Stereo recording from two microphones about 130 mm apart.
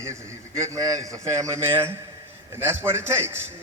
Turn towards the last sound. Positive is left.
turn(degrees=-20)  # may be behind; listen again after turning